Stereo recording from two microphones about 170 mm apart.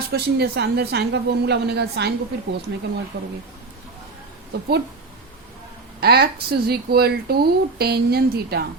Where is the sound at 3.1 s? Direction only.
90° right.